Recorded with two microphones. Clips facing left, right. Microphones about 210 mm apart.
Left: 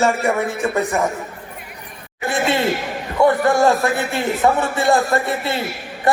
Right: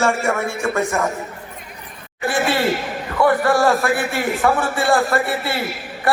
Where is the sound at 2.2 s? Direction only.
20° left (ahead or behind).